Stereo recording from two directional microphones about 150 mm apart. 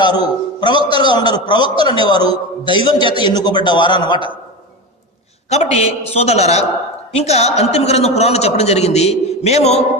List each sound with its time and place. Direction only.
0.0 s a man's voice: 30° left (ahead or behind)
5.5 s a man's voice: 45° left (ahead or behind)